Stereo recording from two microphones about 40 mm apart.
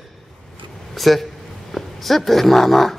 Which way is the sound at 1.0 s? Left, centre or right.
Centre.